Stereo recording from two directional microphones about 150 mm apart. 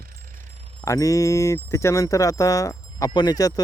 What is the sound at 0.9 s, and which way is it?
Speech, 20° left (ahead or behind).